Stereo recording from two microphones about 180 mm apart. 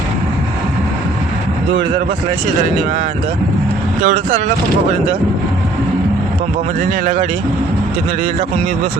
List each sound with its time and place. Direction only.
4.0 s speech: 45° right (ahead or behind)
7.0 s speech: 50° right (ahead or behind)